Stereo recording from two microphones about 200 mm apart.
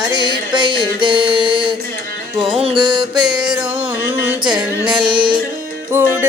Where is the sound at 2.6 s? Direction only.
25° right (ahead or behind).